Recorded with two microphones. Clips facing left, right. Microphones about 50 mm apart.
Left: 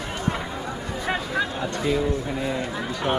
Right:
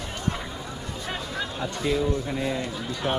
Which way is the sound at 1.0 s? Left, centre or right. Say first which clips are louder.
Left 7 dB; centre.